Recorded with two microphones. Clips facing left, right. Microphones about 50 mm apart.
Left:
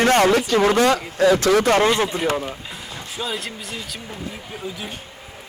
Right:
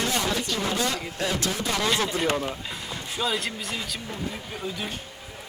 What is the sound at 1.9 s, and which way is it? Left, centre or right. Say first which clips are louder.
A man's voice: left 5 dB; centre.